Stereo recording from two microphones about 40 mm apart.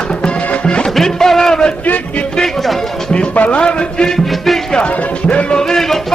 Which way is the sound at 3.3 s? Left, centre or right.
Left.